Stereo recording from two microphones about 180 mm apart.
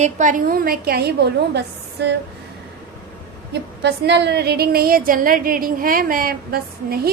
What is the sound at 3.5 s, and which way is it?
A woman's voice, 70° right (ahead or behind).